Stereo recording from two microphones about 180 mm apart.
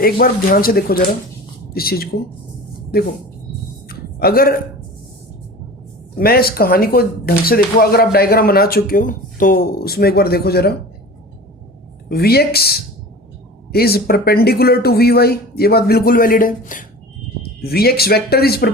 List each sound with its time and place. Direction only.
0.0 s speech: 55° left (ahead or behind)
3.8 s a sound: 55° left (ahead or behind)
6.1 s speech: 55° left (ahead or behind)
12.0 s speech: 60° left (ahead or behind)
17.6 s speech: 60° left (ahead or behind)